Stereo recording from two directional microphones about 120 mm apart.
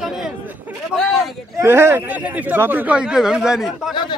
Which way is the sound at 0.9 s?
5° left (ahead or behind).